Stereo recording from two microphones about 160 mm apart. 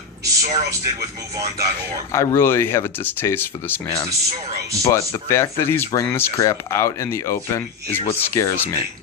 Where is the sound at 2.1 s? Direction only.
20° left (ahead or behind).